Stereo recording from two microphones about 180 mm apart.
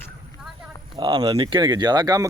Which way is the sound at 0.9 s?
25° right (ahead or behind).